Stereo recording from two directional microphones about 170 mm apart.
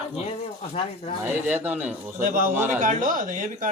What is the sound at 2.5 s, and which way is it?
Speech, 10° right (ahead or behind).